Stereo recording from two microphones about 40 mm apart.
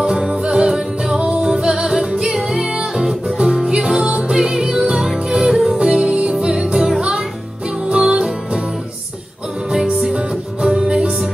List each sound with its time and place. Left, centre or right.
0.0 s music: centre
5.8 s music: right
6.3 s music: centre
9.7 s music: centre